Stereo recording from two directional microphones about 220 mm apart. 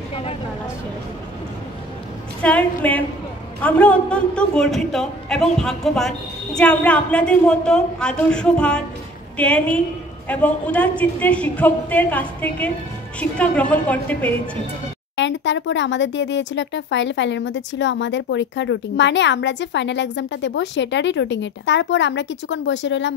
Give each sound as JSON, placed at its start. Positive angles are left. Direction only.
{"t": 0.1, "sound": "vehicle", "side_deg": 25}
{"t": 2.4, "sound": "a man's voice", "side_deg": 5}
{"t": 15.1, "sound": "speech", "side_deg": 55}